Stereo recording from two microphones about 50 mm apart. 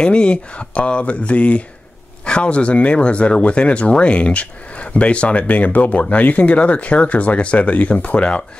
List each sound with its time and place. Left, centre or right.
0.0 s speech: centre